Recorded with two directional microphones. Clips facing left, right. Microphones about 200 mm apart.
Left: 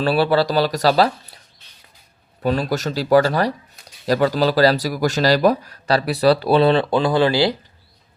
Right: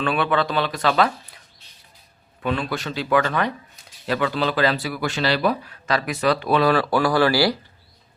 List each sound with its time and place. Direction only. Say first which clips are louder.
0.0 s speech: left 5 dB; 35° left (ahead or behind)
2.4 s speech: left 5 dB; 40° left (ahead or behind); by 7.5 s 20° left (ahead or behind)